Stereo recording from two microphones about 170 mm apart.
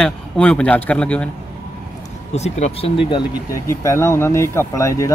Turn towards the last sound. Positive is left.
turn(degrees=20)  # may be behind; listen again after turning